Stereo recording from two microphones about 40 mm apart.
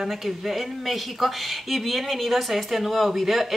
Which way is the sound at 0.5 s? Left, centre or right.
Centre.